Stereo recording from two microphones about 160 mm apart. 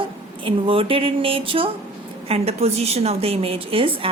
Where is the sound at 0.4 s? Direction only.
35° right (ahead or behind).